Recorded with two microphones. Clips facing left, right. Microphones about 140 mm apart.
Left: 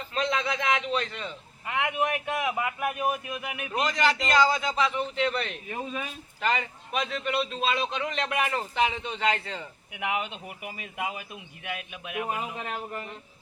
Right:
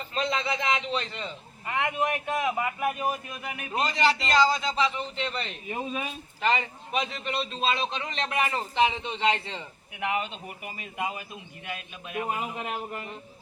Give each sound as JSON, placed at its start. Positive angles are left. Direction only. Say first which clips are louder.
{"t": 0.1, "sound": "a man's voice", "louder": "left 1 dB", "side_deg": 0}
{"t": 3.7, "sound": "a man's voice", "louder": "right 1 dB", "side_deg": 0}
{"t": 5.6, "sound": "speech", "louder": "right 2 dB", "side_deg": -15}
{"t": 6.4, "sound": "a man's voice", "louder": "right 2 dB", "side_deg": 0}
{"t": 12.5, "sound": "speech", "louder": "right 1 dB", "side_deg": -10}